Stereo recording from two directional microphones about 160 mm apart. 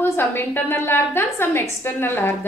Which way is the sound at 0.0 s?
15° left (ahead or behind).